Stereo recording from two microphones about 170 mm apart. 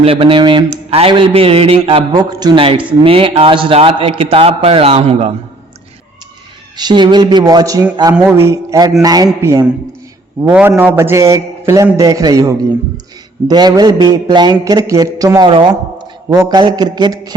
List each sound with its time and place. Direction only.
0.0 s speech: 30° right (ahead or behind)
6.7 s a man's voice: 25° right (ahead or behind)